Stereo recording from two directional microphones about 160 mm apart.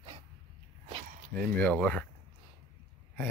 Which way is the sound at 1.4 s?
10° left (ahead or behind).